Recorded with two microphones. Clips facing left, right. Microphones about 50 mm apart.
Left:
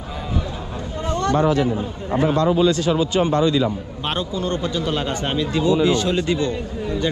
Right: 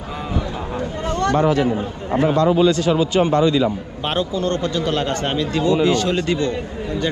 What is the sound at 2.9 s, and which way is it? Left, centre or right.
Speech, right.